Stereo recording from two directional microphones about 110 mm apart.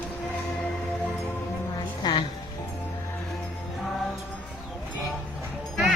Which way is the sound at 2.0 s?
45° left (ahead or behind).